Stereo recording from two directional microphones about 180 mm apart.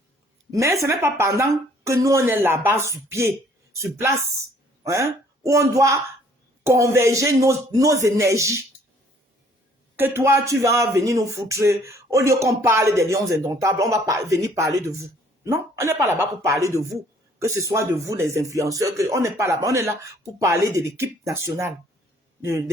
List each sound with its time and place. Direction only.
0.5 s speech: 15° right (ahead or behind)
5.5 s speech: 15° right (ahead or behind)
9.9 s speech: 10° right (ahead or behind)